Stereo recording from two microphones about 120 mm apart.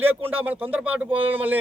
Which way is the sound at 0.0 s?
15° right (ahead or behind).